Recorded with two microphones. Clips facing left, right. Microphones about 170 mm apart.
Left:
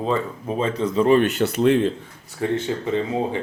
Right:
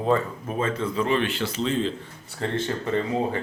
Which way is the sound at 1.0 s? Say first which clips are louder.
Left 9 dB; 45° left (ahead or behind).